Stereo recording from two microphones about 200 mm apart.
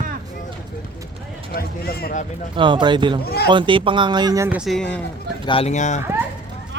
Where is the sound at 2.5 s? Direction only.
25° right (ahead or behind).